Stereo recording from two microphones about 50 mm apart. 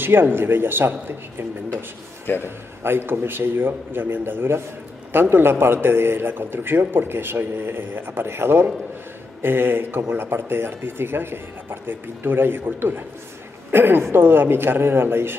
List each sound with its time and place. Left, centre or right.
0.0 s a man's voice: right
2.4 s a man's voice: right